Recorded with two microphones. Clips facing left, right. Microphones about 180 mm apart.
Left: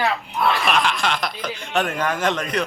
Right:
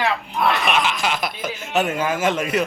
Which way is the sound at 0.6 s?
5° right (ahead or behind).